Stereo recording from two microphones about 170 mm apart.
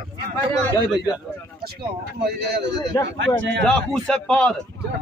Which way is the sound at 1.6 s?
70° right (ahead or behind).